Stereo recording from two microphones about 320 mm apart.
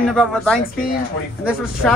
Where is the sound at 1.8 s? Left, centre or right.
Centre.